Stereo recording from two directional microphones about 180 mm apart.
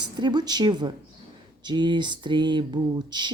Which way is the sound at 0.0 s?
25° right (ahead or behind).